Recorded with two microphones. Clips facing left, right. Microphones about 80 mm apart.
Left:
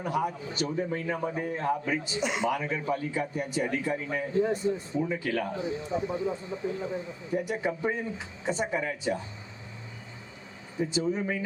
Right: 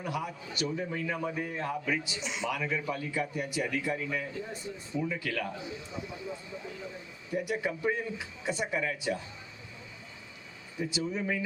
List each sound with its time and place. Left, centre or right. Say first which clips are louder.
0.0 s a man's voice: left 6 dB; left
2.2 s a man's voice: left 6 dB; left
10.8 s a man's voice: left 5 dB; left